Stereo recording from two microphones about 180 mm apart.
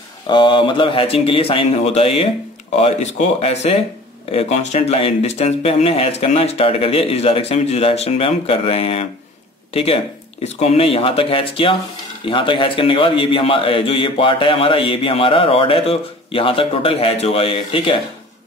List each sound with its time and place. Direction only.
0.3 s a man's voice: 25° left (ahead or behind)
10.4 s a man's voice: 35° left (ahead or behind)